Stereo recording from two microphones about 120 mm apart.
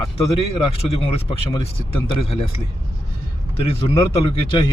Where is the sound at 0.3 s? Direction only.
55° left (ahead or behind).